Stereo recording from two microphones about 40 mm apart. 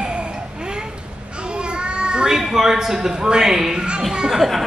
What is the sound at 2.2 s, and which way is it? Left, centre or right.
Speech, centre.